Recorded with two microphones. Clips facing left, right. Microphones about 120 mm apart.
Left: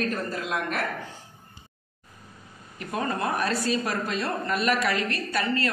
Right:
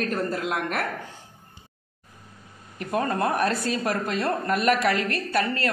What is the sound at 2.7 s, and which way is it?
Speech, 55° right (ahead or behind).